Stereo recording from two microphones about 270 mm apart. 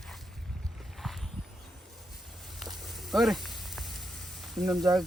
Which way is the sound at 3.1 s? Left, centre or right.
Centre.